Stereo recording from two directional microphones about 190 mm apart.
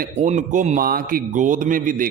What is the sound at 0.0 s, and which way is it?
A man's voice, 40° right (ahead or behind).